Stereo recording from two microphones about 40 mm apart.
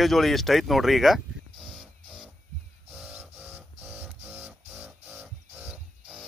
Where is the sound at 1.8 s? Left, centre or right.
Right.